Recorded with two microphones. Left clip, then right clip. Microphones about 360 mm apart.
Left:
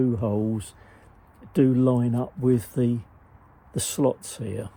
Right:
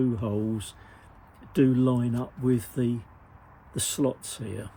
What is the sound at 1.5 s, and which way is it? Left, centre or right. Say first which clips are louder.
Speech: left 3 dB; centre.